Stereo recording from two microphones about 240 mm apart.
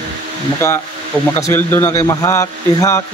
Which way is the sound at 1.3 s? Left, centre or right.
Centre.